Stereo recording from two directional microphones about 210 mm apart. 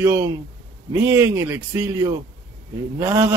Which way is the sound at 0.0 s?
15° right (ahead or behind).